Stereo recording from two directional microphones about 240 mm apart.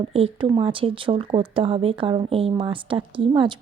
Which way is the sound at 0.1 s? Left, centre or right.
Right.